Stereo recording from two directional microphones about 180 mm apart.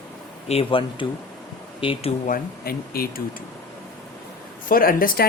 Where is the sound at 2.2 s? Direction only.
55° left (ahead or behind).